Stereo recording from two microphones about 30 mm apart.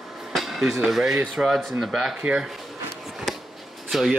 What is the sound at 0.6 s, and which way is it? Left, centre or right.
Speech, centre.